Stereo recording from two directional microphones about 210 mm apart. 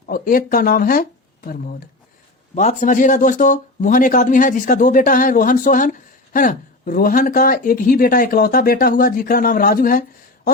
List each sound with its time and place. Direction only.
0.1 s speech: 40° left (ahead or behind)
2.6 s speech: 35° left (ahead or behind)